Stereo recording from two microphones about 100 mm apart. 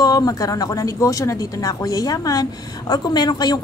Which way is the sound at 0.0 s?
40° left (ahead or behind).